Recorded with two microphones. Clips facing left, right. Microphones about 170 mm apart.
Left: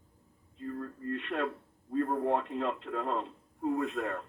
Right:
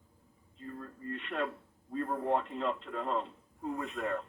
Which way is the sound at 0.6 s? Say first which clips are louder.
Left 5 dB; 55° left (ahead or behind).